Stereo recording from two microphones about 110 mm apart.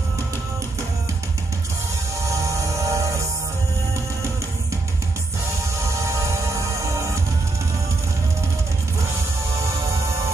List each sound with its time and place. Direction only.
2.2 s music: 30° right (ahead or behind)
5.9 s music: 30° right (ahead or behind)